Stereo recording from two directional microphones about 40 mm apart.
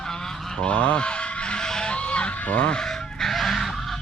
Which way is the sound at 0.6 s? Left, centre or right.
Left.